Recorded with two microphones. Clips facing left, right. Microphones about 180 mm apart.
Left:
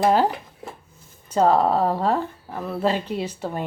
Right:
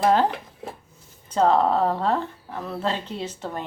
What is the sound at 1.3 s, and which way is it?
A woman's voice, 10° left (ahead or behind).